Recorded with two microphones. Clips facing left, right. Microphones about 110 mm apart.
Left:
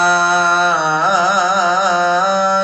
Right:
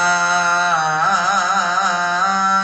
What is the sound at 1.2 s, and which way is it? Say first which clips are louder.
Music: left 4 dB; 25° left (ahead or behind).